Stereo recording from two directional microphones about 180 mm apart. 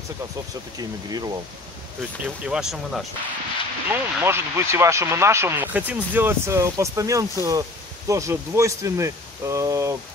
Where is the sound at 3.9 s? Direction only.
15° right (ahead or behind).